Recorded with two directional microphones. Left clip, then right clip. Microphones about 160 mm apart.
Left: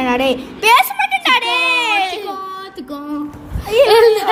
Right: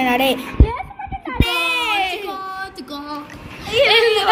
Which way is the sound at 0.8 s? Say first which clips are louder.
Left 14 dB; 45° left (ahead or behind).